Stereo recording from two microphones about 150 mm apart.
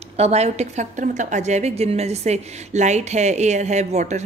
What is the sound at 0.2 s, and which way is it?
A woman's voice, 45° right (ahead or behind).